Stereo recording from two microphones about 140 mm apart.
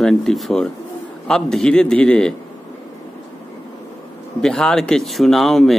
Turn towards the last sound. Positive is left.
turn(degrees=0)  # may be behind; listen again after turning